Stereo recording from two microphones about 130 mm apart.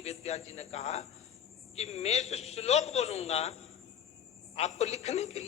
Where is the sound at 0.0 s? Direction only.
55° left (ahead or behind).